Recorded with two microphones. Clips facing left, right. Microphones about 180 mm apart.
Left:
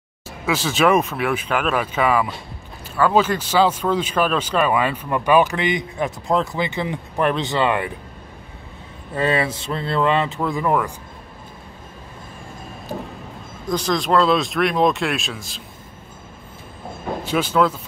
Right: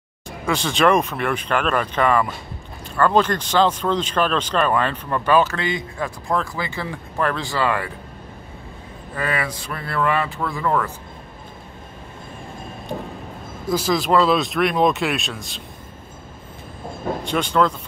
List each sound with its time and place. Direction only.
0.5 s speech: 5° left (ahead or behind); by 7.9 s 20° left (ahead or behind)
9.1 s speech: 25° left (ahead or behind)
13.7 s speech: 5° right (ahead or behind)
17.2 s speech: 5° left (ahead or behind)